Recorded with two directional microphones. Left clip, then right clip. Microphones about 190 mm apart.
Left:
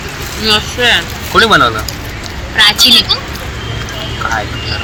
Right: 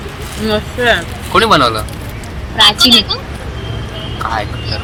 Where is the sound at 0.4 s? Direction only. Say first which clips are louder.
Left 2 dB; 45° right (ahead or behind).